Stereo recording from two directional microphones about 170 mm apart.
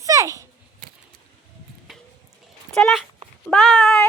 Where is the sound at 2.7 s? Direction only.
Centre (ahead or behind).